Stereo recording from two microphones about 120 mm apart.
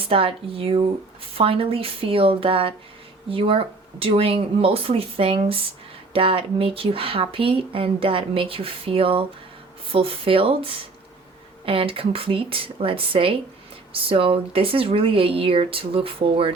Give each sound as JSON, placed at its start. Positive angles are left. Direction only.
{"t": 0.0, "sound": "speech", "side_deg": -50}